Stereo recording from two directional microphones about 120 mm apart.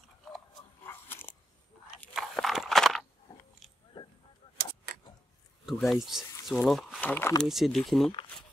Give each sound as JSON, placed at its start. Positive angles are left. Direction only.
{"t": 0.8, "sound": "biting", "side_deg": 20}
{"t": 2.1, "sound": "a sound", "side_deg": 0}
{"t": 3.9, "sound": "honk", "side_deg": 40}
{"t": 5.7, "sound": "speech", "side_deg": 0}
{"t": 7.0, "sound": "speech", "side_deg": 15}
{"t": 7.4, "sound": "speech", "side_deg": 0}